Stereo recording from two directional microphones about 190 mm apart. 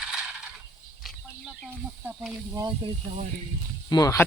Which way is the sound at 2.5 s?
25° right (ahead or behind).